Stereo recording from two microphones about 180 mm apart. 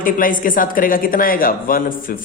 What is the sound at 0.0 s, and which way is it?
A man's voice, 50° left (ahead or behind).